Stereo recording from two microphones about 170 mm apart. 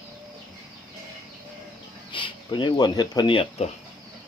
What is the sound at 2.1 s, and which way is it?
Speech, 30° left (ahead or behind).